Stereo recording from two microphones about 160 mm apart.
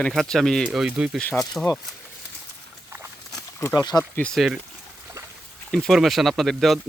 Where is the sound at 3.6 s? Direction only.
20° left (ahead or behind).